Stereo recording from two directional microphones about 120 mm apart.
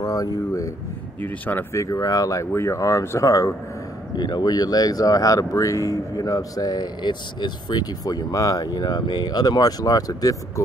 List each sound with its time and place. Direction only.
0.0 s speech: 30° left (ahead or behind)
1.2 s speech: 15° left (ahead or behind)
4.2 s speech: 35° left (ahead or behind)